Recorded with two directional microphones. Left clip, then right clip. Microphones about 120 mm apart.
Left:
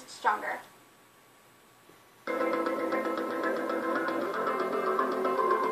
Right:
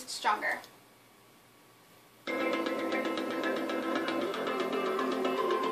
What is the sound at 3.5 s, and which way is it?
Music, 15° right (ahead or behind).